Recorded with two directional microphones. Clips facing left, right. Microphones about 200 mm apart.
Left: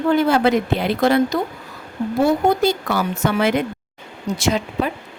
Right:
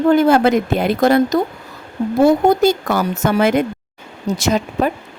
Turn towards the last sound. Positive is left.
turn(degrees=-45)  # may be behind; listen again after turning